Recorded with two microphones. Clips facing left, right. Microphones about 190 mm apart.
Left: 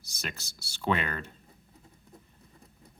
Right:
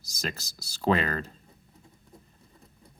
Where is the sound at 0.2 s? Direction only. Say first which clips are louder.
Right 5 dB; 35° right (ahead or behind).